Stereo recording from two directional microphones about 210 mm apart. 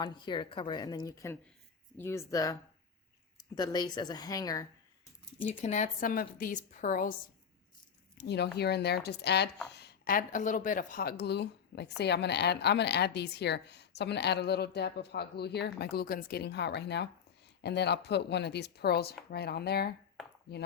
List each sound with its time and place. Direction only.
0.0 s a woman's voice: 20° left (ahead or behind)
5.5 s a woman's voice: 35° left (ahead or behind)
8.2 s speech: 50° left (ahead or behind)